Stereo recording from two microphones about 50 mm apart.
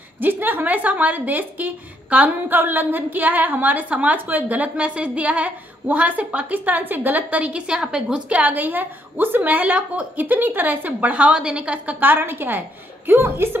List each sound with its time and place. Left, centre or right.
0.2 s a woman's voice: right; by 8.2 s centre
8.3 s a woman's voice: right
12.0 s a woman's voice: right
13.2 s a woman's voice: right